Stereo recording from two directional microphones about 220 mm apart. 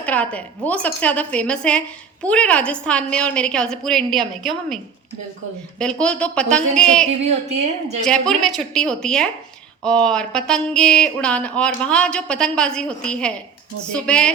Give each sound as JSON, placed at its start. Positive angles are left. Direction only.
{"t": 0.0, "sound": "speech", "side_deg": 5}
{"t": 5.8, "sound": "speech", "side_deg": 5}
{"t": 7.2, "sound": "a woman's voice", "side_deg": -30}
{"t": 8.0, "sound": "speech", "side_deg": 0}